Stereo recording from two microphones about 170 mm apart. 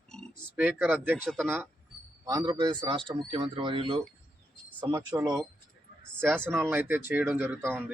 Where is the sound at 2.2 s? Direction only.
25° right (ahead or behind).